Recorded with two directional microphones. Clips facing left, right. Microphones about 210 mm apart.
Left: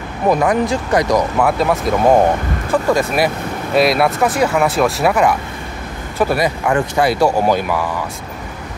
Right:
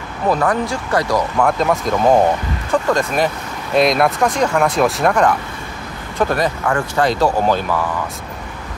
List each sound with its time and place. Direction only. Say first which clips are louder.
0.3 s speech: left 3 dB; 15° left (ahead or behind)
1.4 s speech: left 1 dB; 5° left (ahead or behind)